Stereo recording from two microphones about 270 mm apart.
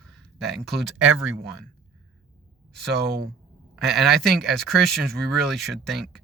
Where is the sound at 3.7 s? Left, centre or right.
Centre.